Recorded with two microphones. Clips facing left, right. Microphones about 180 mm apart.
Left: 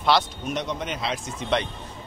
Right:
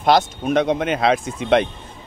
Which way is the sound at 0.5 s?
60° right (ahead or behind).